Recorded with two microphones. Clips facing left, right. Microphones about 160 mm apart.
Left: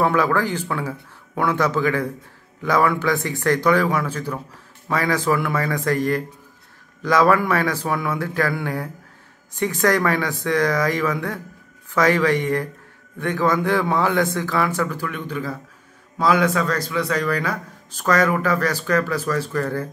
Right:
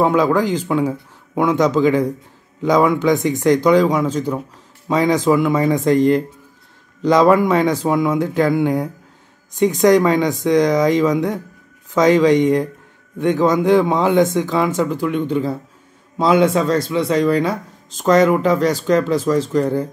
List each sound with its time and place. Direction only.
0.0 s speech: 15° right (ahead or behind)